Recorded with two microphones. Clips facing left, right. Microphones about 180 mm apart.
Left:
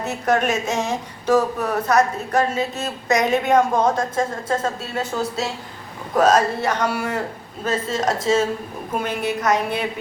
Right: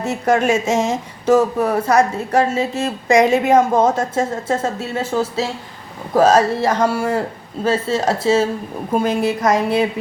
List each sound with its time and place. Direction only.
0.0 s a woman's voice: 30° right (ahead or behind)